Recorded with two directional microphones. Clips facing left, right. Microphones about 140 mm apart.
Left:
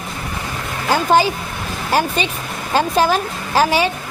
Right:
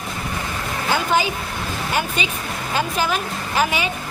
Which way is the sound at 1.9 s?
35° left (ahead or behind).